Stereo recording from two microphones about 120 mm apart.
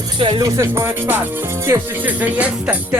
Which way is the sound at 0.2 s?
45° right (ahead or behind).